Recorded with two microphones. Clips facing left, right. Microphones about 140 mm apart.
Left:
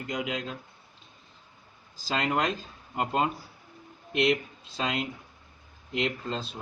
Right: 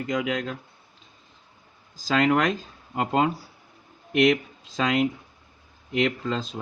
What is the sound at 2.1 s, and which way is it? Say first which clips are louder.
Speech: right 6 dB; 90° right.